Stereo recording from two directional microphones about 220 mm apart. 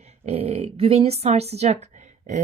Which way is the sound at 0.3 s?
25° right (ahead or behind).